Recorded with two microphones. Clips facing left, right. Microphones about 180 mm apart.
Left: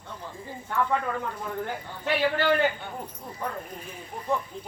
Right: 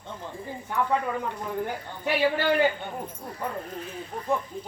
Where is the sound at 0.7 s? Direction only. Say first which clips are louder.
Right 1 dB; 15° right (ahead or behind).